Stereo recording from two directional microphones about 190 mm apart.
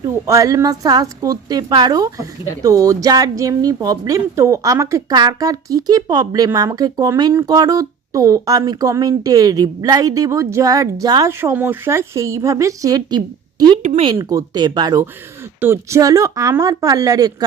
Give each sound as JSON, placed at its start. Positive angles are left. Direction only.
{"t": 0.0, "sound": "a woman's voice", "side_deg": -15}
{"t": 13.8, "sound": "speech", "side_deg": -35}
{"t": 14.1, "sound": "a woman's voice", "side_deg": -20}